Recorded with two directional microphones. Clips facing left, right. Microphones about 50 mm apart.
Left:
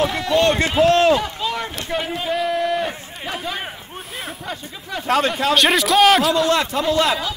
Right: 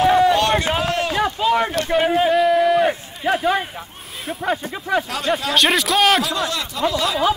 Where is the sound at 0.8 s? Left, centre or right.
Left.